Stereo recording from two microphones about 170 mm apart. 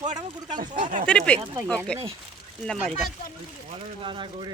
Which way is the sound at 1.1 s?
5° left (ahead or behind).